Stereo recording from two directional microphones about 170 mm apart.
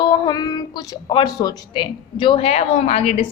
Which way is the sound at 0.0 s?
25° left (ahead or behind).